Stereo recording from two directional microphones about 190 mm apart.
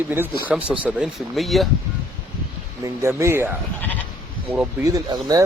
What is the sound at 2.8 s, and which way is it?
Speech, 15° right (ahead or behind).